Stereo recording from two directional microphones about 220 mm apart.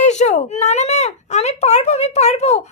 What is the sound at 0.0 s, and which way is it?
Speech, 30° left (ahead or behind).